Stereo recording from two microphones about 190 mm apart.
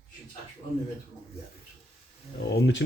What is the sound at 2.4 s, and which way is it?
Speech, 65° left (ahead or behind).